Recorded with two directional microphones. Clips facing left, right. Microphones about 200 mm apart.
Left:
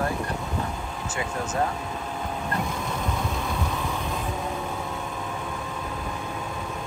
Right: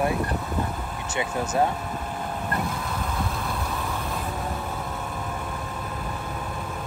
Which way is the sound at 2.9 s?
5° right (ahead or behind).